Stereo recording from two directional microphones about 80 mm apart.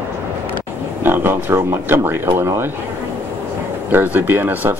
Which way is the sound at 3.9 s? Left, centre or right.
Right.